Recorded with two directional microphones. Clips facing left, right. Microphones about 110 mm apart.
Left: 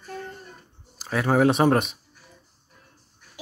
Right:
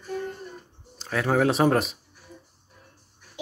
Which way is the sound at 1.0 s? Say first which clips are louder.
Left 2 dB; 5° left (ahead or behind).